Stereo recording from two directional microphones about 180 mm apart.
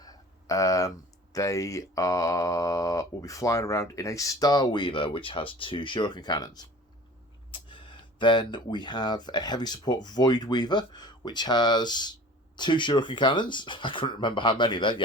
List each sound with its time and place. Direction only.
0.0 s speech: 20° left (ahead or behind)